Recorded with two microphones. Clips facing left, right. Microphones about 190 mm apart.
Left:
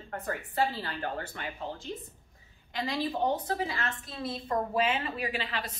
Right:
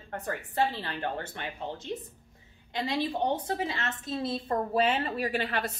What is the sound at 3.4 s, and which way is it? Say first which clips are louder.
A woman's voice: right 1 dB; 25° right (ahead or behind).